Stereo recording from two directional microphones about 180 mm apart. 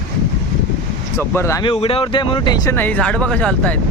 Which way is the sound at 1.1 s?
15° left (ahead or behind).